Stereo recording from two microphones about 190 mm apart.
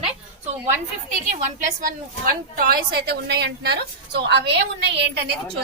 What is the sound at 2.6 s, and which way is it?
A woman's voice, 55° right (ahead or behind).